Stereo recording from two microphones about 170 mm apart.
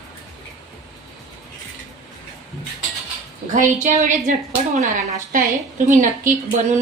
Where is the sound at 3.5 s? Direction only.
50° right (ahead or behind).